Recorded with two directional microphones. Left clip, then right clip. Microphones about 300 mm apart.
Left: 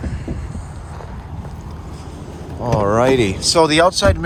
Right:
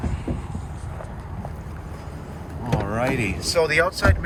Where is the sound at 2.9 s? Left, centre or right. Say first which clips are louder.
Left 9 dB; centre.